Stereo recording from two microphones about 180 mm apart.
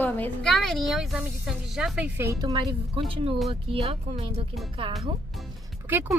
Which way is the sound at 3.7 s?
30° right (ahead or behind).